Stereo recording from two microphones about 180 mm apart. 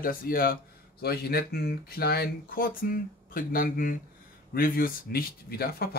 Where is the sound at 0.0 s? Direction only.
55° left (ahead or behind).